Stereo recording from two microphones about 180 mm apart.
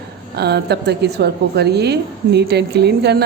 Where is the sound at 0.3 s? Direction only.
65° right (ahead or behind).